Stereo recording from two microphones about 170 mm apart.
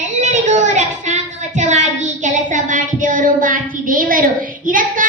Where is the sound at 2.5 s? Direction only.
50° right (ahead or behind).